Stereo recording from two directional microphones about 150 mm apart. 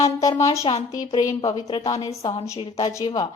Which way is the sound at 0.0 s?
20° left (ahead or behind).